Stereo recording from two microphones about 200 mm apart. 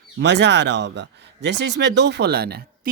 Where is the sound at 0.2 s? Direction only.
60° right (ahead or behind).